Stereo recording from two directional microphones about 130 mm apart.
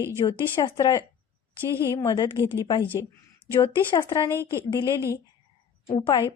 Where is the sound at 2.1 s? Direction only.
35° left (ahead or behind).